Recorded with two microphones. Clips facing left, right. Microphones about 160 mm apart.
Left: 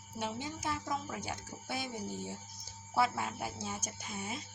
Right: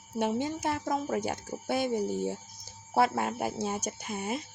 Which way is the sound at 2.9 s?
60° right (ahead or behind).